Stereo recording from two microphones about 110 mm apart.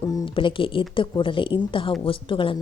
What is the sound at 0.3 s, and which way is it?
Speech, 50° left (ahead or behind).